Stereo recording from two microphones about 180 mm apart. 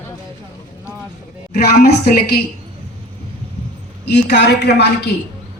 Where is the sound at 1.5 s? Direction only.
60° left (ahead or behind).